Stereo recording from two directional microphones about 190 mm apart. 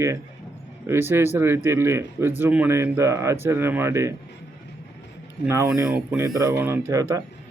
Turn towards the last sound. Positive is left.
turn(degrees=-15)  # may be behind; listen again after turning